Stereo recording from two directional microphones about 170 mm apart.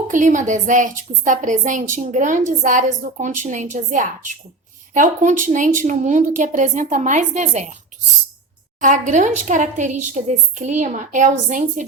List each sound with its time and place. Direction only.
0.1 s a woman's voice: 50° right (ahead or behind)
8.8 s a woman's voice: 45° right (ahead or behind)